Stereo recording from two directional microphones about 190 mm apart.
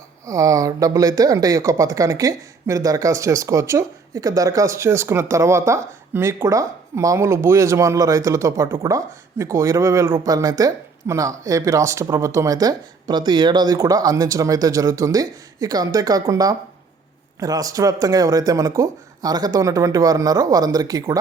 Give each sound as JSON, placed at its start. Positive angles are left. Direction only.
{"t": 0.3, "sound": "speech", "side_deg": -15}